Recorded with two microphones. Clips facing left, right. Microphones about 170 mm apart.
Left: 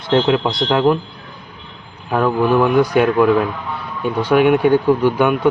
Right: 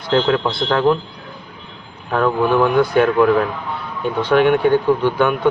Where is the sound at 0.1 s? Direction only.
15° left (ahead or behind).